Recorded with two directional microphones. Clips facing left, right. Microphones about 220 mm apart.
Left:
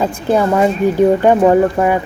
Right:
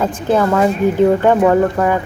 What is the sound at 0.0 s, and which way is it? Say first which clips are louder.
Speech: left 1 dB; 15° left (ahead or behind).